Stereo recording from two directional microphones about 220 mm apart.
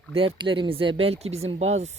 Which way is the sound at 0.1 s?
25° right (ahead or behind).